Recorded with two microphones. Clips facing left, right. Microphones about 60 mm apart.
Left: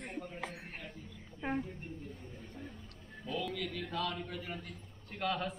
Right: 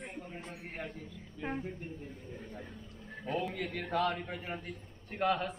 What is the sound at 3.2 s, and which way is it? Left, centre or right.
A man's voice, right.